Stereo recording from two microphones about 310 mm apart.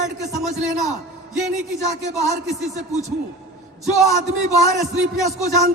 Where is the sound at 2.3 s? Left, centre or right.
Right.